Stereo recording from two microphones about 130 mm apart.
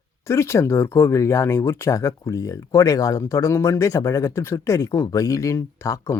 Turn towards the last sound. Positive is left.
turn(degrees=20)  # may be behind; listen again after turning